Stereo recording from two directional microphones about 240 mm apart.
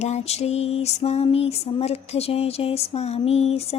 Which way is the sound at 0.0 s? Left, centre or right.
Left.